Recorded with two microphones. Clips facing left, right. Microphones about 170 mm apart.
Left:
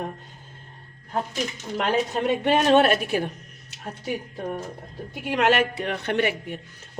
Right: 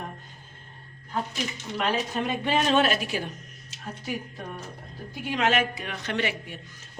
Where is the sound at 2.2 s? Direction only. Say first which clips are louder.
Left 5 dB; 65° left (ahead or behind).